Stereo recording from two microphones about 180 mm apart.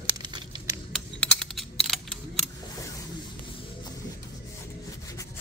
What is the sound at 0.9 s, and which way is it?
Computer keyboard, centre (ahead or behind).